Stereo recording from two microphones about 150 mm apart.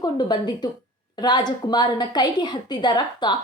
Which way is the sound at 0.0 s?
30° left (ahead or behind).